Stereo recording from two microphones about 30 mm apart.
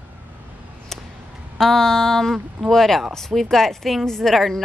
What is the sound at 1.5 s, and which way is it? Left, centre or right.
A woman's voice, centre.